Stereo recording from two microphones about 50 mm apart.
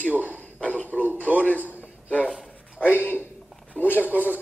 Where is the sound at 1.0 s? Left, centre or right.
Right.